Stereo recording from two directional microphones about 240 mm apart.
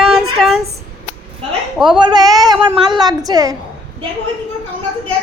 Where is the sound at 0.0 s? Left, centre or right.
Centre.